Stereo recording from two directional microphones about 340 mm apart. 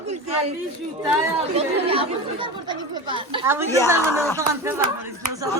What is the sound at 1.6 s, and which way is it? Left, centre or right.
Speech, centre.